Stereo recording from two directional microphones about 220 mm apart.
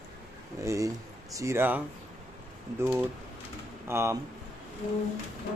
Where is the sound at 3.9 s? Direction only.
10° right (ahead or behind).